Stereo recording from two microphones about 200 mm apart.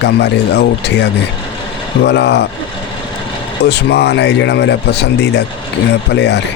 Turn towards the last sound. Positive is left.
turn(degrees=60)  # may be behind; listen again after turning